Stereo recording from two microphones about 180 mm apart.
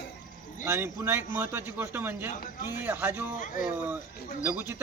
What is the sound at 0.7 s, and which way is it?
Speech, 15° right (ahead or behind).